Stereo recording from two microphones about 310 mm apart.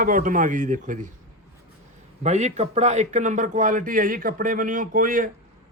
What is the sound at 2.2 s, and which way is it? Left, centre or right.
A man's voice, right.